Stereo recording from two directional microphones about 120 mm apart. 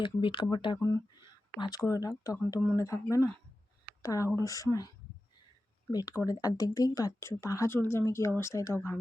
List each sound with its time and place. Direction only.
0.0 s speech: 45° left (ahead or behind)
0.8 s speech: 25° left (ahead or behind)
1.2 s speech: 40° left (ahead or behind)
5.9 s speech: 35° left (ahead or behind)